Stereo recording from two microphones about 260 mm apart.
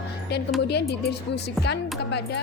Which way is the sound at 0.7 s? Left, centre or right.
Left.